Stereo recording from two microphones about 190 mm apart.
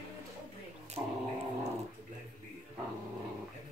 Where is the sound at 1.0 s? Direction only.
20° right (ahead or behind).